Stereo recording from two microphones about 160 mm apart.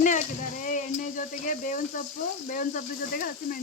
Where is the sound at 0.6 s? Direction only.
55° left (ahead or behind).